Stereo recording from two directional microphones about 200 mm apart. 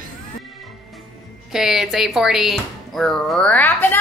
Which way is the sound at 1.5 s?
Centre (ahead or behind).